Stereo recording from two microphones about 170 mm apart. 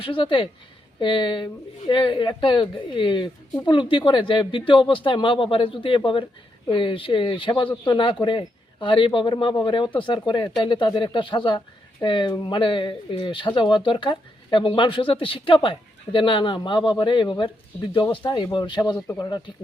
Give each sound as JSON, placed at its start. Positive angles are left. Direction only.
{"t": 0.0, "sound": "a man's voice", "side_deg": 30}